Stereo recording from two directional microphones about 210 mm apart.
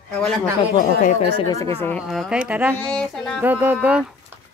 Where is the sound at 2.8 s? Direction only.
5° left (ahead or behind).